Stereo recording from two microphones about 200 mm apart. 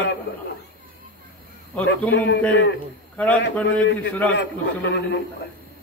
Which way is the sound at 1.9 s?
60° left (ahead or behind).